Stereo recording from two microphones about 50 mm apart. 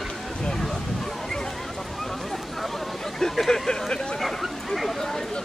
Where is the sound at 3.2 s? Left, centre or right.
Centre.